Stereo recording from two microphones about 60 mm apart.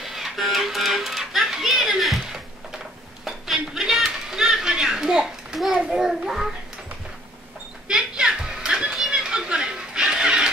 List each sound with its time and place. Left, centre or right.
0.0 s music: centre
3.3 s children playing: centre
7.9 s children playing: centre